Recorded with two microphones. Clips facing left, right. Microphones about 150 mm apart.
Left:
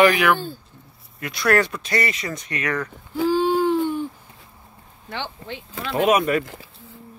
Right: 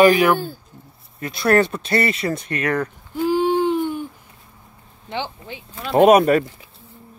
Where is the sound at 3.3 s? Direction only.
15° right (ahead or behind).